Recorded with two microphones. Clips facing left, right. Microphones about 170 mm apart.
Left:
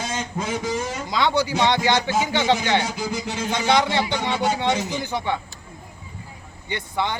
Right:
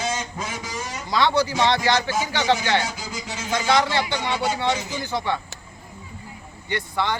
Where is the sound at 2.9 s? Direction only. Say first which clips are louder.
Left 6 dB; 55° left (ahead or behind).